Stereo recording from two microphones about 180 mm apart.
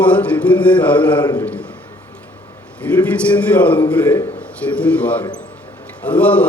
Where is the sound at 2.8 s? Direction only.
10° left (ahead or behind).